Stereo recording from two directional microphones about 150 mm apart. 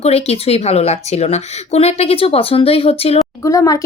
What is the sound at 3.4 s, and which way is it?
Speech, 20° left (ahead or behind).